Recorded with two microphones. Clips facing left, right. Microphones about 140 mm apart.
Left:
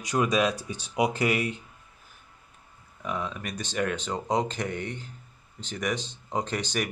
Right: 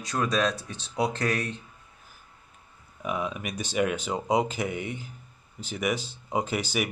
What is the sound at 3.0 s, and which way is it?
Speech, 10° right (ahead or behind).